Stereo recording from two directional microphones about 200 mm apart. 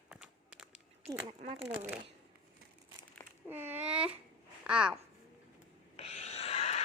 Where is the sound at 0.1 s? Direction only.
Centre (ahead or behind).